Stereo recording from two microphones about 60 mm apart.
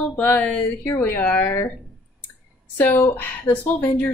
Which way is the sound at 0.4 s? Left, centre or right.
Centre.